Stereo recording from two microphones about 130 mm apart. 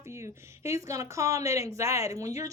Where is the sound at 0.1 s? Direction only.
20° right (ahead or behind).